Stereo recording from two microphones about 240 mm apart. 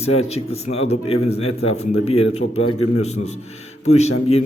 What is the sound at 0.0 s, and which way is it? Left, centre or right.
A man's voice, left.